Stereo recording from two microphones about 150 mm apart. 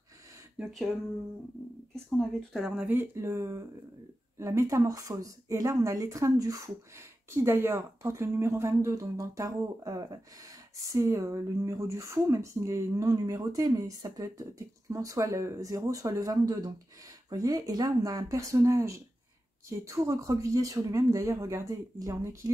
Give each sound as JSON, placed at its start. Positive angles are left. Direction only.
{"t": 0.6, "sound": "speech", "side_deg": 0}
{"t": 2.0, "sound": "a woman's voice", "side_deg": 0}